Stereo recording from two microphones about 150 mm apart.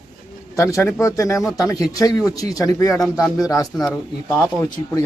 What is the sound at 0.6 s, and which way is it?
A man's voice, 20° left (ahead or behind).